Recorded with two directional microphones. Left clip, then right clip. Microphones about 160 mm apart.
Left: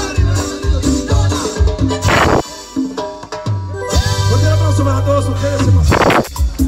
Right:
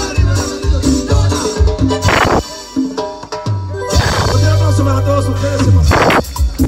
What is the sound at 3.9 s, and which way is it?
Music, 20° right (ahead or behind).